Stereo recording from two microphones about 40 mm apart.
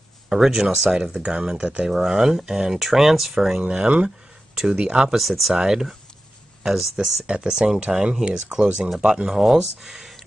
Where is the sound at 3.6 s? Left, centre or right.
Right.